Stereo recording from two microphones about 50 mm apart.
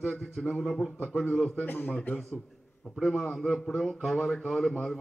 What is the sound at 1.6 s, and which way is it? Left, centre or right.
Speech, left.